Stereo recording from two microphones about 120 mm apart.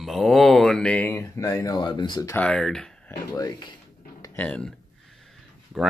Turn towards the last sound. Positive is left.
turn(degrees=0)  # may be behind; listen again after turning